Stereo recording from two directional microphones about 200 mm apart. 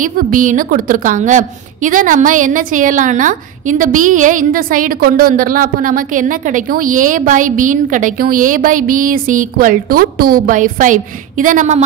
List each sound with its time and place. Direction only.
0.0 s a woman's voice: 40° right (ahead or behind)